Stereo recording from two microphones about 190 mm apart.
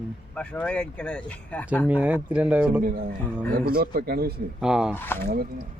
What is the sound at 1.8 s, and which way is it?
Speech, 10° right (ahead or behind).